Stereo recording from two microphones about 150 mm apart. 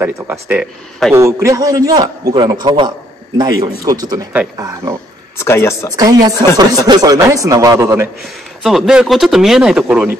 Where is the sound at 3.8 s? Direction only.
25° right (ahead or behind).